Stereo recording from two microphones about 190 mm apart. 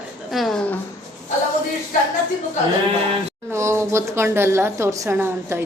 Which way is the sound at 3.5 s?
15° right (ahead or behind).